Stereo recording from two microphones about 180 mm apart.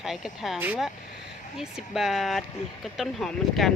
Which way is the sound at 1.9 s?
Centre (ahead or behind).